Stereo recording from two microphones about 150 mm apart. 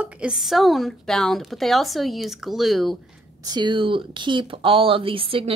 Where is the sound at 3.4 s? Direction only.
30° right (ahead or behind).